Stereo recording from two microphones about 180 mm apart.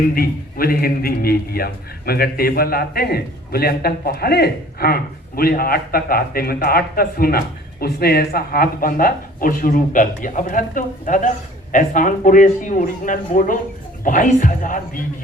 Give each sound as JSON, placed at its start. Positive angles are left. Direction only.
{"t": 0.1, "sound": "a man's voice", "side_deg": 55}